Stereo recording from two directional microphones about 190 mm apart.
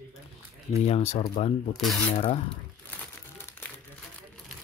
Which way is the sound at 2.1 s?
30° left (ahead or behind).